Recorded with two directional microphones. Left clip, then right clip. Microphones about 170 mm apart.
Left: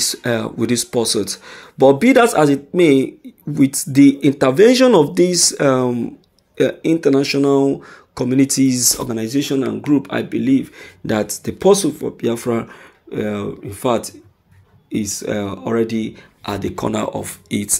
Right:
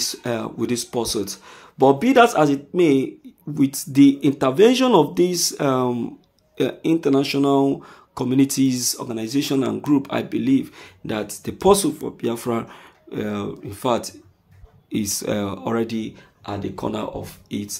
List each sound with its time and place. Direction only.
0.0 s speech: 20° left (ahead or behind)
8.9 s speech: 25° left (ahead or behind)
9.3 s speech: 5° left (ahead or behind)
11.1 s speech: 30° left (ahead or behind)
11.6 s speech: 10° left (ahead or behind)
15.0 s speech: 10° right (ahead or behind)
15.3 s speech: centre (ahead or behind)
16.4 s speech: 45° left (ahead or behind)
16.7 s speech: 25° left (ahead or behind)